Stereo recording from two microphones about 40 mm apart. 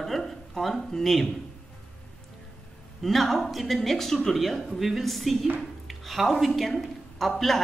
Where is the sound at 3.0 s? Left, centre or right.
Centre.